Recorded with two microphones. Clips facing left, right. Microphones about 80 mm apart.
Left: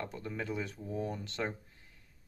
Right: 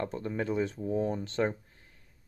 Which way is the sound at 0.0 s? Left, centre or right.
Right.